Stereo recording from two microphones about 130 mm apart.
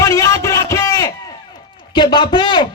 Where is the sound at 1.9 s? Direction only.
35° left (ahead or behind).